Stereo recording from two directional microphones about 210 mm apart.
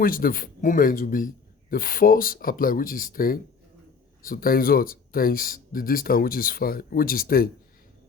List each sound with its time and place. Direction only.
0.0 s speech: 45° left (ahead or behind)